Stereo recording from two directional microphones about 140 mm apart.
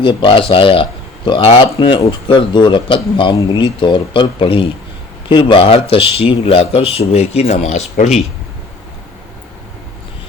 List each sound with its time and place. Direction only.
0.0 s speech: 35° left (ahead or behind); by 8.2 s 55° left (ahead or behind)